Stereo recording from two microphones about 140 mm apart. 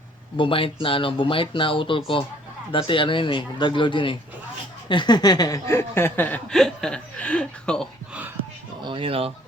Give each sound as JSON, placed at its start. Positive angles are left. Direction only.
{"t": 0.3, "sound": "speech", "side_deg": 40}
{"t": 4.9, "sound": "chuckle", "side_deg": 35}
{"t": 8.8, "sound": "speech", "side_deg": -35}